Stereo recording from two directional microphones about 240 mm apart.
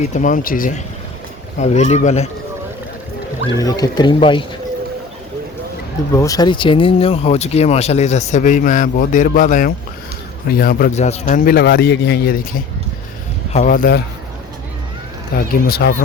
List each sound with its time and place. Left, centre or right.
0.0 s a man's voice: left
3.6 s speech: centre
6.1 s a man's voice: centre; by 14.0 s left
15.4 s a man's voice: left